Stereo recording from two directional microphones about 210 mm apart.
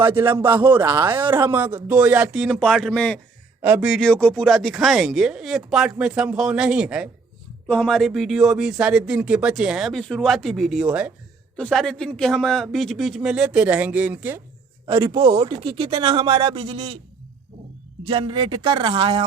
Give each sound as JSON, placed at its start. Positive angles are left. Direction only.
{"t": 0.1, "sound": "speech", "side_deg": -25}
{"t": 0.7, "sound": "a man's voice", "side_deg": -10}
{"t": 3.6, "sound": "speech", "side_deg": -5}
{"t": 14.8, "sound": "speech", "side_deg": -20}
{"t": 18.0, "sound": "speech", "side_deg": -25}